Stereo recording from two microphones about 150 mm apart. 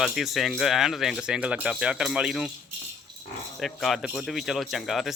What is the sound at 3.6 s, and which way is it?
Speech, centre (ahead or behind).